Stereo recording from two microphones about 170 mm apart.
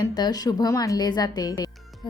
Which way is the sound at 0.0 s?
25° left (ahead or behind).